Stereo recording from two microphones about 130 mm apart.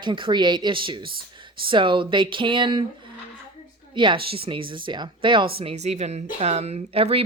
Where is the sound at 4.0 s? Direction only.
40° right (ahead or behind).